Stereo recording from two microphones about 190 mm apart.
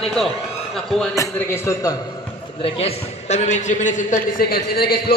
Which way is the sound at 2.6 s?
30° left (ahead or behind).